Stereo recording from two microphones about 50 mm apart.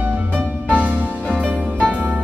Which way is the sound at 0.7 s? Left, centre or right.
Right.